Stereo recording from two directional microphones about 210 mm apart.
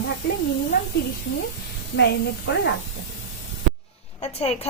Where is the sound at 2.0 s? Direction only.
55° left (ahead or behind).